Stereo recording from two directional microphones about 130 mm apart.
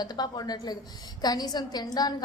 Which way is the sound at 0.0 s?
30° left (ahead or behind).